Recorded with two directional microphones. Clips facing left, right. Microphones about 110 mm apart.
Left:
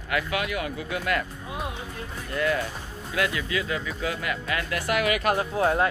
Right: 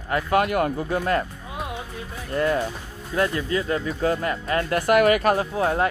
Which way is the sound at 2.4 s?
35° right (ahead or behind).